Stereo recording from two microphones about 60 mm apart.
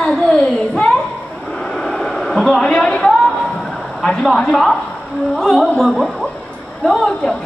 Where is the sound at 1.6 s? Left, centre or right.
Centre.